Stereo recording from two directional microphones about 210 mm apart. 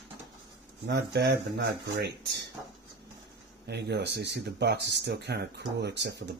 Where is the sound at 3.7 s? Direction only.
55° right (ahead or behind).